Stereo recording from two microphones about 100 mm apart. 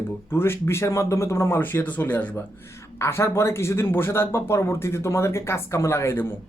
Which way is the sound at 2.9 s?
25° left (ahead or behind).